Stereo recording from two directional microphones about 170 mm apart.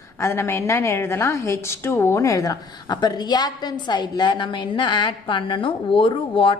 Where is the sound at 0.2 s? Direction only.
15° left (ahead or behind).